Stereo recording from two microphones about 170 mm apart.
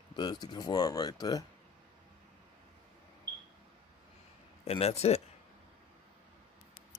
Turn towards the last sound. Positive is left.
turn(degrees=40)  # may be behind; listen again after turning